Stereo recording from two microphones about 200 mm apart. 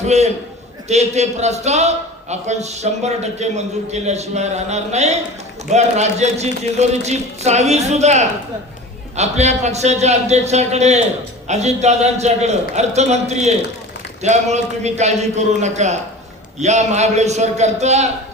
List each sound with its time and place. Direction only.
0.0 s a man's voice: 35° right (ahead or behind)